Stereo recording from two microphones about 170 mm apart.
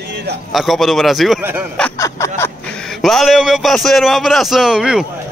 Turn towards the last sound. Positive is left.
turn(degrees=-5)  # may be behind; listen again after turning